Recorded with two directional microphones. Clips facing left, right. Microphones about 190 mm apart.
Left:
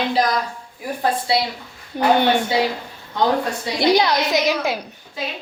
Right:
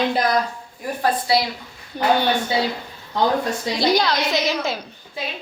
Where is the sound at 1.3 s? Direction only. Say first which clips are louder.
Right 1 dB; 25° left (ahead or behind).